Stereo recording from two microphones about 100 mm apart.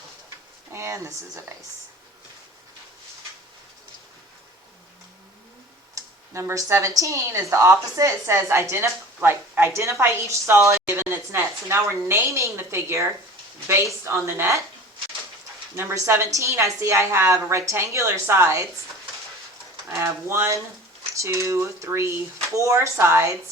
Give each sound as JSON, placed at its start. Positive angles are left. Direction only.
{"t": 0.7, "sound": "speech", "side_deg": -25}
{"t": 6.0, "sound": "a sound", "side_deg": -35}
{"t": 6.3, "sound": "a woman's voice", "side_deg": -30}
{"t": 15.7, "sound": "a woman's voice", "side_deg": -25}
{"t": 19.9, "sound": "a woman's voice", "side_deg": -30}